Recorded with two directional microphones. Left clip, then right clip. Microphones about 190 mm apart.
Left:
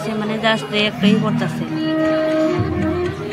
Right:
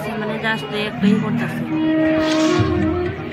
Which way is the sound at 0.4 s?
25° left (ahead or behind).